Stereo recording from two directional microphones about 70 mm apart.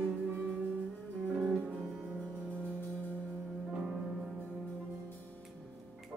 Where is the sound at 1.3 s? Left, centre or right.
Centre.